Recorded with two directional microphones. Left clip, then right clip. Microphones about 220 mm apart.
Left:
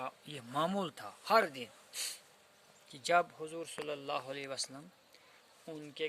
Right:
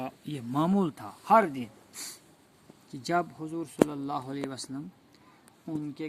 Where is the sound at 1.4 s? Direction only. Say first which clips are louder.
Right 6 dB; 50° left (ahead or behind).